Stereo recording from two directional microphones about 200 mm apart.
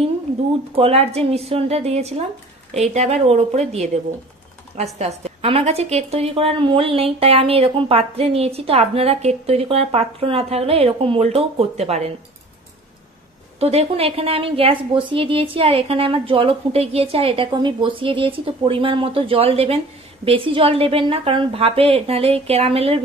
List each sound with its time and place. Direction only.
0.7 s speech: 30° right (ahead or behind)
4.9 s a woman's voice: 35° right (ahead or behind)
13.6 s a woman's voice: 30° right (ahead or behind)